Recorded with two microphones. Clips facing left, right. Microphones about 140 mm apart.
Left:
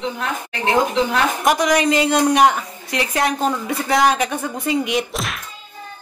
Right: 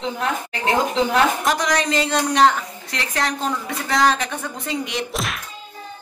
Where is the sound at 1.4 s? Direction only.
10° left (ahead or behind).